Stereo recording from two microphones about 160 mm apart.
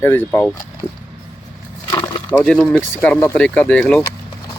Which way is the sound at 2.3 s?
5° left (ahead or behind).